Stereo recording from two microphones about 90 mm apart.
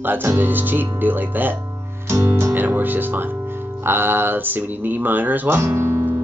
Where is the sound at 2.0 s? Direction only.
30° right (ahead or behind).